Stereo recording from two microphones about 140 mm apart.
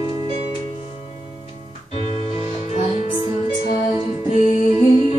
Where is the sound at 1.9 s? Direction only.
45° left (ahead or behind).